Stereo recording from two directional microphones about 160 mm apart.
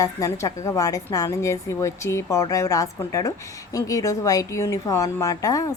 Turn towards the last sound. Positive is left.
turn(degrees=20)  # may be behind; listen again after turning